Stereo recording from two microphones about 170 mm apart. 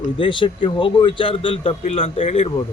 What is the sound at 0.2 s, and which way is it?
Speech, 30° left (ahead or behind).